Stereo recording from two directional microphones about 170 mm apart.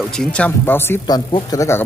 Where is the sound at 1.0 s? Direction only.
25° left (ahead or behind).